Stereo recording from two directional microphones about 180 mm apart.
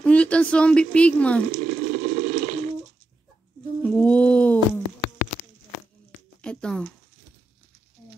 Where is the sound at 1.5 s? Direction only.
40° right (ahead or behind).